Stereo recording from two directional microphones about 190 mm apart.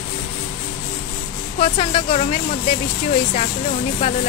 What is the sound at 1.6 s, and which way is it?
Speech, 30° left (ahead or behind).